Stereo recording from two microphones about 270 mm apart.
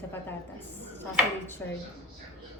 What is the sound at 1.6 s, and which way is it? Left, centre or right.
Speech, centre.